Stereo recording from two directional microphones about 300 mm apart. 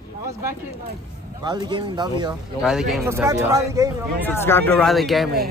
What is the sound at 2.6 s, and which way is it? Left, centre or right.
Speech, centre.